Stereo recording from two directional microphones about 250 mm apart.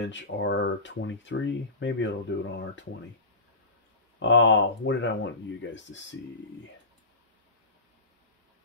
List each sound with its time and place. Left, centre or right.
0.0 s speech: left
4.2 s speech: left